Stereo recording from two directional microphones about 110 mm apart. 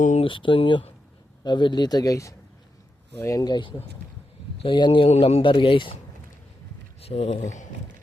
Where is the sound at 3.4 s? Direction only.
45° left (ahead or behind).